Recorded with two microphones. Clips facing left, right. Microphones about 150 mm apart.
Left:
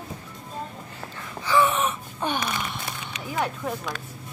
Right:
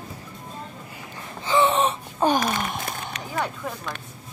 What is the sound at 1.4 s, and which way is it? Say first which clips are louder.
Gasp: right 2 dB; 20° right (ahead or behind).